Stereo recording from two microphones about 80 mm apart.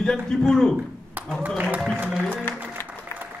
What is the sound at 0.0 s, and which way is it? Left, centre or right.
Speech, centre.